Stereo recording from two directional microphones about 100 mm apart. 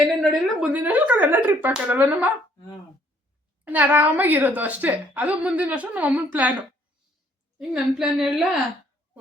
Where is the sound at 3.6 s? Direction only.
15° right (ahead or behind).